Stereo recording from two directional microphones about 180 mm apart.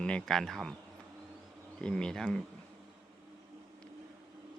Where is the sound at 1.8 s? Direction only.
5° left (ahead or behind).